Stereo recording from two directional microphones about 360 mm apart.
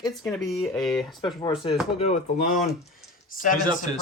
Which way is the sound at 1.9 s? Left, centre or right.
Centre.